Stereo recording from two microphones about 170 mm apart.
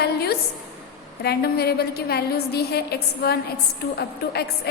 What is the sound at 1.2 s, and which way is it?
A woman's voice, 70° left (ahead or behind).